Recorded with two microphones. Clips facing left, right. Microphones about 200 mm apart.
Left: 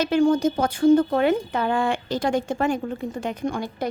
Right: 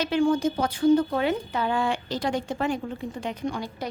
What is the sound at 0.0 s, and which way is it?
Speech, 45° left (ahead or behind).